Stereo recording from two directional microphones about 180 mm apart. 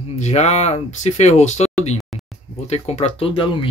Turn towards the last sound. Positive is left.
turn(degrees=30)  # may be behind; listen again after turning